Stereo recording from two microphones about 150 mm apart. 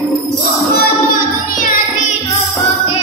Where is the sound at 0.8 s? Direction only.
65° left (ahead or behind).